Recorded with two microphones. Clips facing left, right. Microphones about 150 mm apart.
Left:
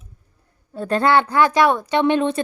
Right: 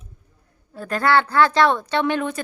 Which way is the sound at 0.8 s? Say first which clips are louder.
Left 2 dB; 25° left (ahead or behind).